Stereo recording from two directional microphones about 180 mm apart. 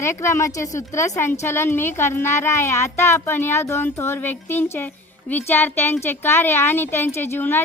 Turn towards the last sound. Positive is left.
turn(degrees=10)  # may be behind; listen again after turning